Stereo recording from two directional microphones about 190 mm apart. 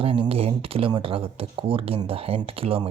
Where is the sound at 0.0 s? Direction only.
30° right (ahead or behind).